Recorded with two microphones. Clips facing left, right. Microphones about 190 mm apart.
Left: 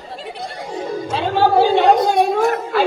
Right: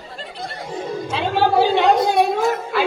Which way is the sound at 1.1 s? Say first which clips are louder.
Left 2 dB; 45° left (ahead or behind).